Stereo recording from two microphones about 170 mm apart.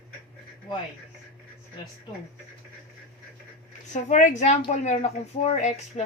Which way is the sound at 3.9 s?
45° left (ahead or behind).